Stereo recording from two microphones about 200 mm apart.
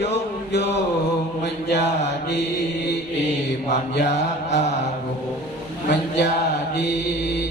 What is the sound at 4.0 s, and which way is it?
Mantra, 60° left (ahead or behind).